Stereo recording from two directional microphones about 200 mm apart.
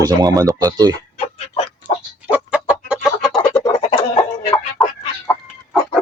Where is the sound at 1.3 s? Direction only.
30° left (ahead or behind).